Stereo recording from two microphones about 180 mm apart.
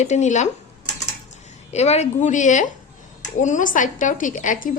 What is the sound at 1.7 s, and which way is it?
A woman's voice, 35° left (ahead or behind).